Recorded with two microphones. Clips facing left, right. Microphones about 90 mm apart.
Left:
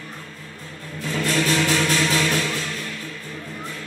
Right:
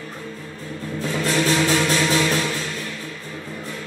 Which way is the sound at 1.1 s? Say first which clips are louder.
Right 1 dB; 20° right (ahead or behind).